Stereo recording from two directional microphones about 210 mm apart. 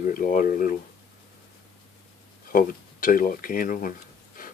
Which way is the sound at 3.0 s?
40° left (ahead or behind).